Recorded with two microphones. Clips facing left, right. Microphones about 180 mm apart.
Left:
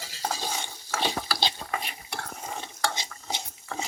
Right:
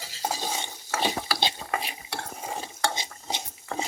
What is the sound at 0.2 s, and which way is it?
Stir, 15° right (ahead or behind).